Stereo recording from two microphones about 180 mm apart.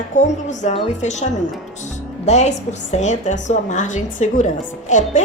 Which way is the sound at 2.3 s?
40° left (ahead or behind).